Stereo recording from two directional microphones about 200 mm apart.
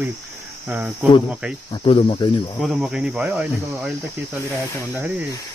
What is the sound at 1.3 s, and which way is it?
Speech, 5° right (ahead or behind).